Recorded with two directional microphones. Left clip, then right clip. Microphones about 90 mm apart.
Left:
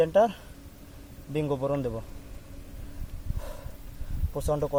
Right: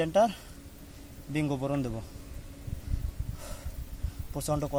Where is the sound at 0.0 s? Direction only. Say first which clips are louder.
Left 3 dB; 25° left (ahead or behind).